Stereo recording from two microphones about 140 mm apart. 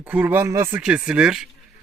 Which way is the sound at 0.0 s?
10° right (ahead or behind).